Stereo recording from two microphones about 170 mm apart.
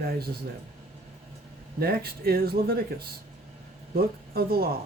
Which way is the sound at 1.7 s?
65° right (ahead or behind).